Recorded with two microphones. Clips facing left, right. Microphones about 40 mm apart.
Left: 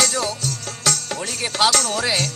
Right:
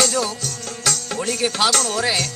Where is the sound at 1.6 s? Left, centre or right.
Left.